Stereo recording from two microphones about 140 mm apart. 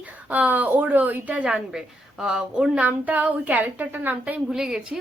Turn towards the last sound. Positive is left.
turn(degrees=-5)  # may be behind; listen again after turning